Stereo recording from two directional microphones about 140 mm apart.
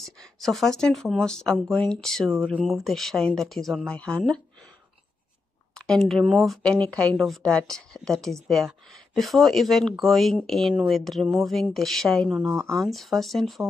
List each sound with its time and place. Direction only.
0.0 s speech: centre (ahead or behind)
5.8 s speech: 5° left (ahead or behind)
12.4 s speech: 20° right (ahead or behind)
12.7 s speech: centre (ahead or behind)